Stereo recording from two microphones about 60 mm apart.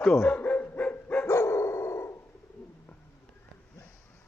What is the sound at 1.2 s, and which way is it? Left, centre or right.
Dog, left.